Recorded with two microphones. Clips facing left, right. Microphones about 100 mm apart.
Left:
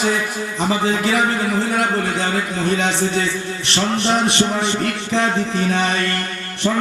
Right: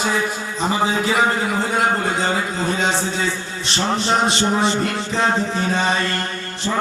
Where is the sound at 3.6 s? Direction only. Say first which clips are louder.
Left 1 dB; 65° left (ahead or behind).